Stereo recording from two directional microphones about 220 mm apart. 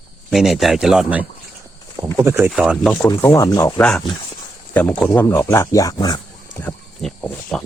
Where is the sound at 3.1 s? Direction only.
15° left (ahead or behind).